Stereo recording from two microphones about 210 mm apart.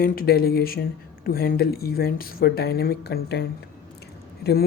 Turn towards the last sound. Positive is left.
turn(degrees=50)  # may be behind; listen again after turning